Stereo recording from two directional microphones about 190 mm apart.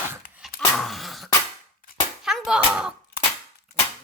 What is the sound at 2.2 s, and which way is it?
Speech, centre (ahead or behind).